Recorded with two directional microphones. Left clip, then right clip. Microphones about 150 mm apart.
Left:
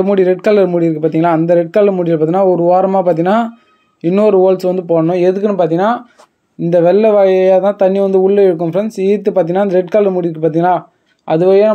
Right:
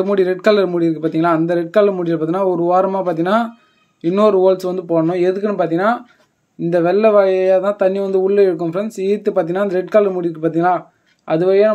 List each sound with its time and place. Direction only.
0.0 s speech: 20° left (ahead or behind)